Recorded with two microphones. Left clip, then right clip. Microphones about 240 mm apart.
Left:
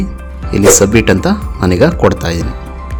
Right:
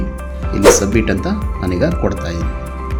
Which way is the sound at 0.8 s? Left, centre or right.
Left.